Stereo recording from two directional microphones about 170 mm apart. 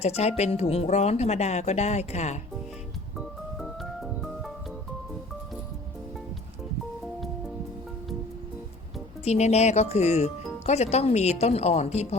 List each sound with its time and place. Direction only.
0.0 s speech: 40° left (ahead or behind)
3.2 s music: centre (ahead or behind)
9.2 s speech: 40° left (ahead or behind)